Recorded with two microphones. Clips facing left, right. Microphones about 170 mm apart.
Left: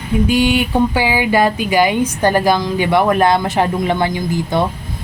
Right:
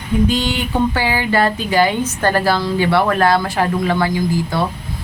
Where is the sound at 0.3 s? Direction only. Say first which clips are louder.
Left 5 dB; 10° left (ahead or behind).